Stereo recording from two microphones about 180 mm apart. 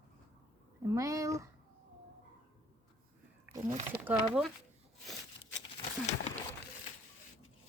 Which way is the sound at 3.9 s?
10° right (ahead or behind).